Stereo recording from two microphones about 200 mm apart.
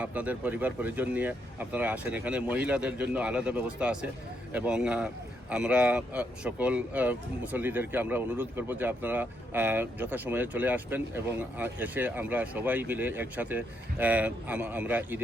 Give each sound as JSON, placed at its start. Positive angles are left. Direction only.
{"t": 0.0, "sound": "a man's voice", "side_deg": -5}